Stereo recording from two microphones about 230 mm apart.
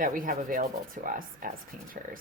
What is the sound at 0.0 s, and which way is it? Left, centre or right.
Speech, right.